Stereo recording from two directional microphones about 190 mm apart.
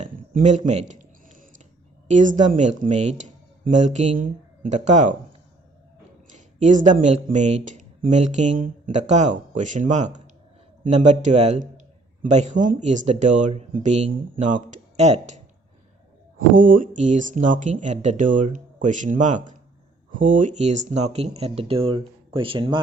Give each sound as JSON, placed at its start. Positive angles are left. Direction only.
{"t": 0.0, "sound": "a sound", "side_deg": -40}
{"t": 2.0, "sound": "speech", "side_deg": -40}
{"t": 6.3, "sound": "speech", "side_deg": -40}
{"t": 16.5, "sound": "speech", "side_deg": -45}